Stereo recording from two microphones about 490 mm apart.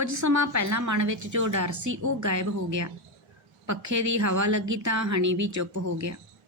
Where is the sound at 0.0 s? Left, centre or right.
Right.